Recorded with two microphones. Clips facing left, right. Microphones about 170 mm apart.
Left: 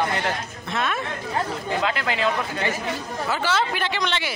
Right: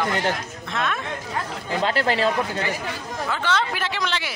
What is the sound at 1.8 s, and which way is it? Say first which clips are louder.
Speech: right 5 dB; 35° right (ahead or behind).